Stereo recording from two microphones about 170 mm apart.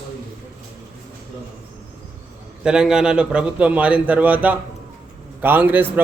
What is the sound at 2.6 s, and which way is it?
A man's voice, 5° right (ahead or behind).